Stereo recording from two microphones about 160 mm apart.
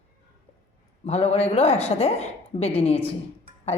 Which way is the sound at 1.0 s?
40° left (ahead or behind).